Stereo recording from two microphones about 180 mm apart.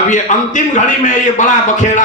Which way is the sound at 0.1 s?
45° left (ahead or behind).